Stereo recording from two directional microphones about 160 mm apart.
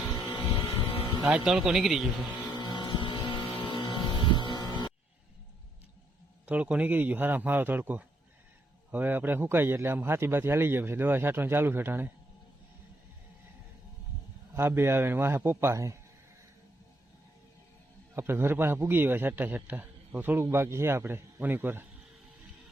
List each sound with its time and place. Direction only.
0.1 s vehicle: 20° left (ahead or behind)
1.3 s speech: 5° right (ahead or behind)
2.5 s a sound: 30° left (ahead or behind)
6.4 s a man's voice: 10° right (ahead or behind)
14.5 s a man's voice: 15° right (ahead or behind)
18.1 s a man's voice: 15° right (ahead or behind)